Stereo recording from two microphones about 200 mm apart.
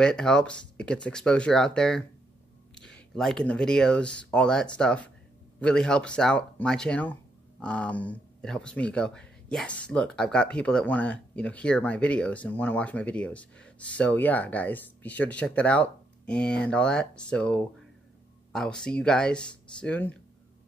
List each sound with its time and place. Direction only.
0.0 s speech: 5° left (ahead or behind)